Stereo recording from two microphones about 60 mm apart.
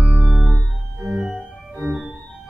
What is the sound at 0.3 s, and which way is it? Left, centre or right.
Organ, centre.